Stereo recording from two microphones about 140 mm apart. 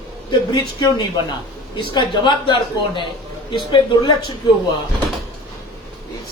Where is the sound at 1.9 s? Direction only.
30° left (ahead or behind).